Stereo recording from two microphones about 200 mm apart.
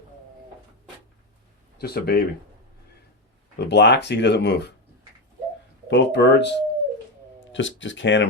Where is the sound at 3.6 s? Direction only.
60° left (ahead or behind).